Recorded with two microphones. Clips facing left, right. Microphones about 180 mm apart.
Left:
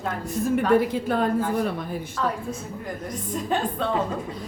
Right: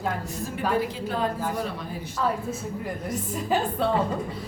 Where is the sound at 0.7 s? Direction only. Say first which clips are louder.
Left 4 dB; 55° left (ahead or behind).